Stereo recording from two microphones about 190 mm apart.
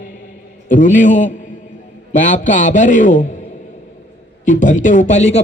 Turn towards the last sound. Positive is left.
turn(degrees=40)  # may be behind; listen again after turning